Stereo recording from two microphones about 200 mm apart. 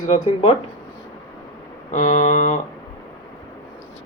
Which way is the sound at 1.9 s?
40° left (ahead or behind).